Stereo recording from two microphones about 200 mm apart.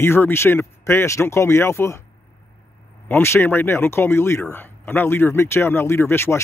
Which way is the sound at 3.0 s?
10° left (ahead or behind).